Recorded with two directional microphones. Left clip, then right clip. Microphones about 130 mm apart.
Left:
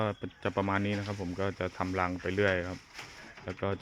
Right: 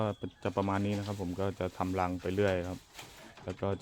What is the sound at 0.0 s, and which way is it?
Speech, 15° right (ahead or behind).